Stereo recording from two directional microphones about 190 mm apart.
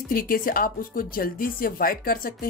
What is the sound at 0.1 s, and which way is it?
Speech, 50° left (ahead or behind).